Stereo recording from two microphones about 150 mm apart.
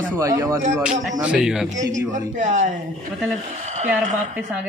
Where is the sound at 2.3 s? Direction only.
55° right (ahead or behind).